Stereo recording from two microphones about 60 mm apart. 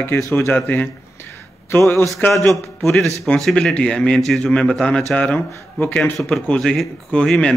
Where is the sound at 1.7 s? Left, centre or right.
Left.